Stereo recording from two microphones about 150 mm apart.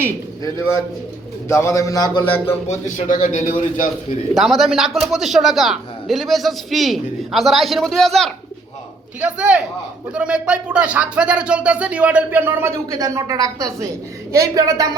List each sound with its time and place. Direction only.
1.5 s a man's voice: 20° left (ahead or behind); by 2.7 s 40° left (ahead or behind)
2.8 s speech: 55° left (ahead or behind)
4.4 s a man's voice: centre (ahead or behind)
9.2 s a woman's voice: 10° right (ahead or behind)